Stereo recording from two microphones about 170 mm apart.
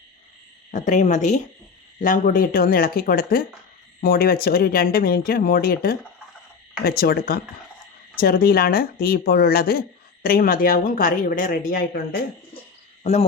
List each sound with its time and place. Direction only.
0.7 s speech: 45° left (ahead or behind); by 12.2 s 65° left (ahead or behind)
13.0 s cricket: 40° left (ahead or behind)